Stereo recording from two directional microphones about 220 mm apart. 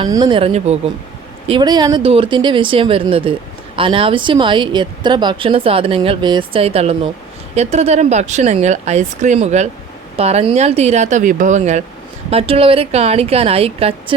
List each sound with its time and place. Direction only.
0.0 s a woman's voice: 20° right (ahead or behind)